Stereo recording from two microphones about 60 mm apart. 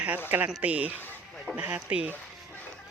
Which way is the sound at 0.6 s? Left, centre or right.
Right.